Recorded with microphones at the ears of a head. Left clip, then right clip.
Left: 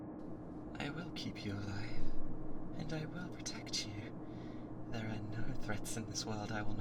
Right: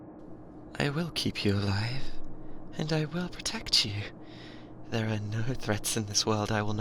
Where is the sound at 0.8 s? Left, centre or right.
Right.